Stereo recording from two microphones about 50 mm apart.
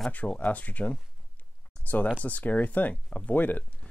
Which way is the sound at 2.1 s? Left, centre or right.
Left.